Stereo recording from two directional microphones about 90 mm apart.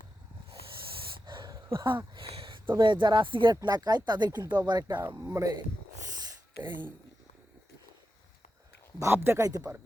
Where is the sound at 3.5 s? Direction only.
50° right (ahead or behind).